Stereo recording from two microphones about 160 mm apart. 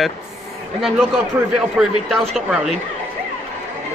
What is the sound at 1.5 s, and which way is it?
Speech, centre (ahead or behind).